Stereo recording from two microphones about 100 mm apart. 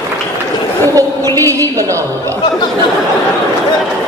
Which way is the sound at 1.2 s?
25° left (ahead or behind).